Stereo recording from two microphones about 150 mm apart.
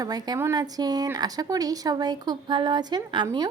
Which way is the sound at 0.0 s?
25° right (ahead or behind).